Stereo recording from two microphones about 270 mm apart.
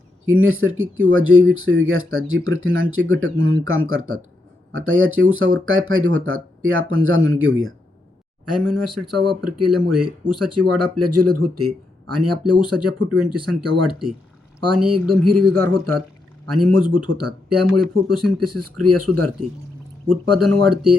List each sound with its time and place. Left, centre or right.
0.3 s speech: right
8.4 s speech: right
16.5 s speech: right
17.7 s speech: centre
18.3 s speech: right